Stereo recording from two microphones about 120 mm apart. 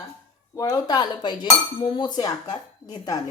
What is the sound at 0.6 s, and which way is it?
Speech, 30° left (ahead or behind).